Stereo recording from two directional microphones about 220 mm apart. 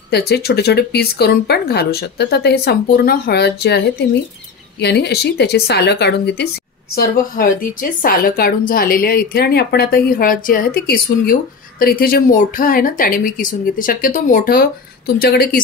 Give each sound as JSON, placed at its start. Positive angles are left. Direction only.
{"t": 0.1, "sound": "a woman's voice", "side_deg": 45}